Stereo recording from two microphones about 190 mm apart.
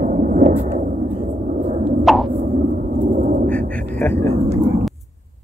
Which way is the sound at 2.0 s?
Centre (ahead or behind).